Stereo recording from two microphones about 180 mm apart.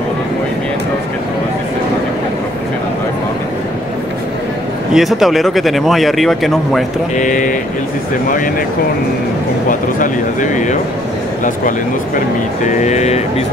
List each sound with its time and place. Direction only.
4.9 s speech: centre (ahead or behind)
7.2 s speech: 45° left (ahead or behind)
9.7 s speech: 45° left (ahead or behind)
12.6 s speech: 40° left (ahead or behind)